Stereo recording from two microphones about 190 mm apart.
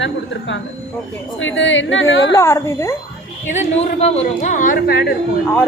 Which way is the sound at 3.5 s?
35° left (ahead or behind).